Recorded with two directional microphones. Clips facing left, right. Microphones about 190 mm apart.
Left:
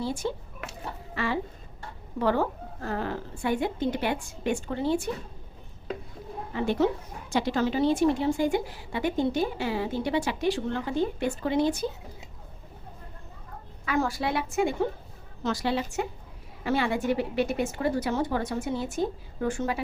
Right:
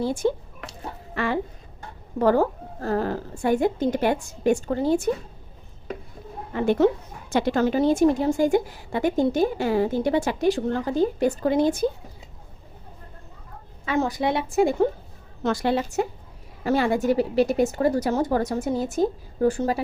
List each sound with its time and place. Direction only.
0.0 s a woman's voice: 50° right (ahead or behind)
1.1 s a sound: 55° right (ahead or behind)
2.1 s a woman's voice: 45° right (ahead or behind)
6.5 s a woman's voice: 55° right (ahead or behind)
13.8 s a woman's voice: 25° right (ahead or behind)
14.5 s a woman's voice: 40° right (ahead or behind)
15.4 s a woman's voice: 55° right (ahead or behind); by 19.8 s 35° right (ahead or behind)